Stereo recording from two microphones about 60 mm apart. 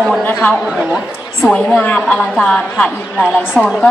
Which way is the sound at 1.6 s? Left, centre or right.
Centre.